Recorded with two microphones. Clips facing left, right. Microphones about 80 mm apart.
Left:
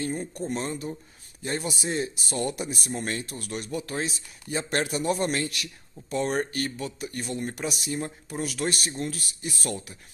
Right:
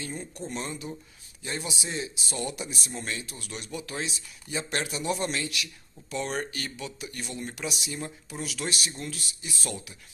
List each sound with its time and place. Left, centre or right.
0.0 s speech: left